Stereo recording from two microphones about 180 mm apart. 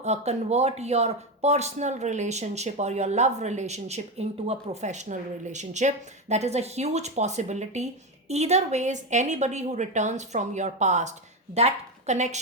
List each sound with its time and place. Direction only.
0.0 s a woman's voice: 40° right (ahead or behind)